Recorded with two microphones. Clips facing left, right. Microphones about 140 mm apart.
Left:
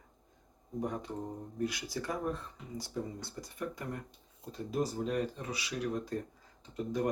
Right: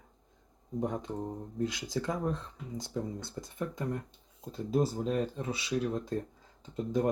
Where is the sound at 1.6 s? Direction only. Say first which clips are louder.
Right 3 dB; 20° right (ahead or behind).